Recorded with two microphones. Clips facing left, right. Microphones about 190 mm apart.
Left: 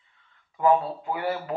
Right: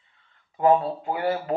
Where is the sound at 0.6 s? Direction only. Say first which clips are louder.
Right 2 dB; 35° right (ahead or behind).